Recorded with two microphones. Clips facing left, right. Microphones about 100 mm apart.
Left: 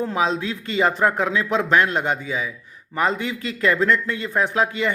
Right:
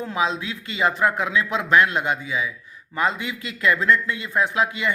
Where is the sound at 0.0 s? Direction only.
35° left (ahead or behind).